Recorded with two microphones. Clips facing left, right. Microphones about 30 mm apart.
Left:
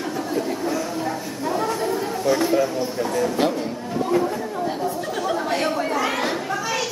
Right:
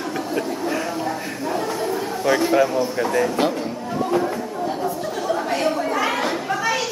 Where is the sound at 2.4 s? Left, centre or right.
Right.